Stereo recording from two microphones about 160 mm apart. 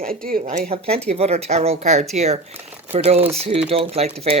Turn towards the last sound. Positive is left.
turn(degrees=-40)  # may be behind; listen again after turning